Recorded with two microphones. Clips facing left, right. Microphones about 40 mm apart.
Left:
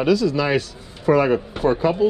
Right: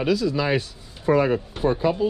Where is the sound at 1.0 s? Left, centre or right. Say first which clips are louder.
Left 3 dB; left.